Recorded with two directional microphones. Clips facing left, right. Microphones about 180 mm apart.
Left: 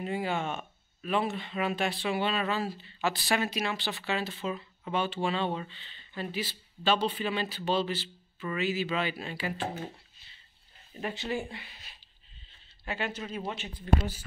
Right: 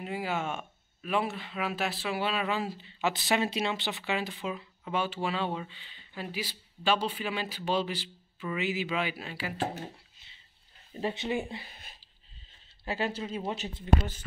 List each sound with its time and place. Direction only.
0.0 s speech: 5° right (ahead or behind)
10.2 s a sound: 20° right (ahead or behind)
11.0 s speech: 25° right (ahead or behind)
11.6 s speech: 45° right (ahead or behind)
12.8 s speech: 35° right (ahead or behind)
13.2 s speech: 20° right (ahead or behind)